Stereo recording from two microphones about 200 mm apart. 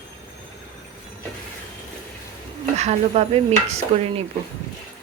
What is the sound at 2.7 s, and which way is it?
Dishes, 30° right (ahead or behind).